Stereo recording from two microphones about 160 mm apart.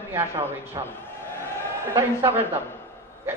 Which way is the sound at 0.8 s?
25° right (ahead or behind).